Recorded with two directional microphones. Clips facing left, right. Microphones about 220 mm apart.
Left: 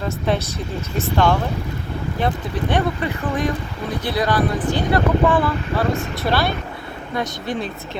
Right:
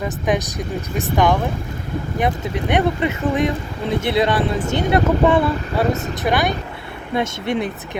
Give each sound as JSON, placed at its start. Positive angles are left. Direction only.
{"t": 0.0, "sound": "speech", "side_deg": -15}